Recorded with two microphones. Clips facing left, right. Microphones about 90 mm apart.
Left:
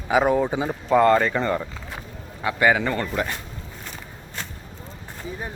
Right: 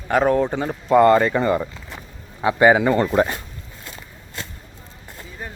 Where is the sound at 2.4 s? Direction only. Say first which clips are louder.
Right 5 dB; 25° right (ahead or behind).